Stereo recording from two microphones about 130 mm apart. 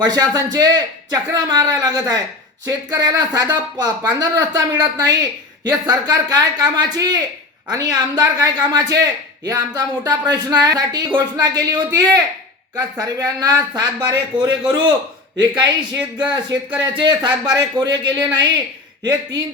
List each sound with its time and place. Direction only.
0.0 s a man's voice: 30° right (ahead or behind)